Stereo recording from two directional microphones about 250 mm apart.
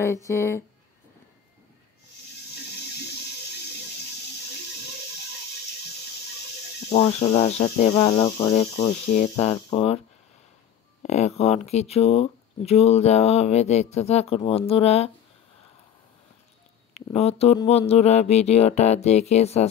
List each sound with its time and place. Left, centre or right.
0.0 s speech: centre
6.9 s speech: left
16.9 s speech: left